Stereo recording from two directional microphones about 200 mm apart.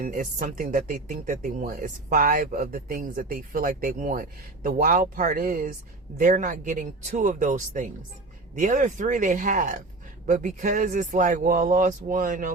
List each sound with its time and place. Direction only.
0.0 s speech: 40° right (ahead or behind)